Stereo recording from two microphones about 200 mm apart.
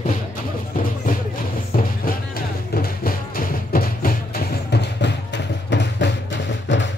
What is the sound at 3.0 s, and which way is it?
Music, 45° left (ahead or behind).